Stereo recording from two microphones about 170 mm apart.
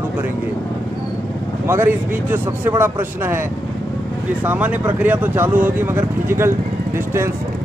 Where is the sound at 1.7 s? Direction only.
15° right (ahead or behind).